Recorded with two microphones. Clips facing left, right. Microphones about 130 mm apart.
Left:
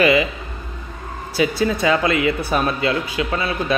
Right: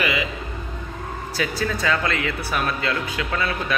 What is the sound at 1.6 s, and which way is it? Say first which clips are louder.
A man's voice: left 4 dB; 15° left (ahead or behind).